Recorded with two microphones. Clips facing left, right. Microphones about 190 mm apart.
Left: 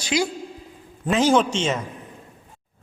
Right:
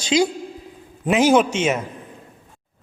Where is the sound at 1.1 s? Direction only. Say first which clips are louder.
Right 3 dB; 10° right (ahead or behind).